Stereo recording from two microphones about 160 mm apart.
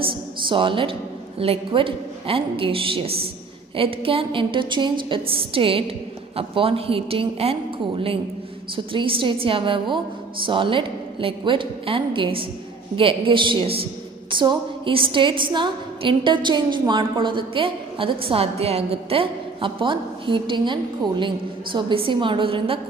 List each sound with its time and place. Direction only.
0.0 s a woman's voice: 30° right (ahead or behind)